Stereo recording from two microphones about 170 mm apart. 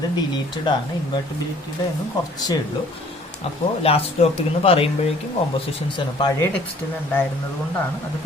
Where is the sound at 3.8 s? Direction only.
35° left (ahead or behind).